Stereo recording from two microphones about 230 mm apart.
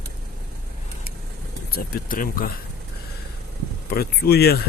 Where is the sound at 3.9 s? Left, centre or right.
Left.